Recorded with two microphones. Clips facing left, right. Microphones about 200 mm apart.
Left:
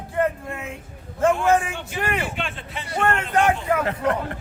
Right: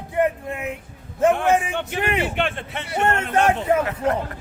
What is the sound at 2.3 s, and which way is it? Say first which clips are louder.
Speech: right 6 dB; 60° right (ahead or behind).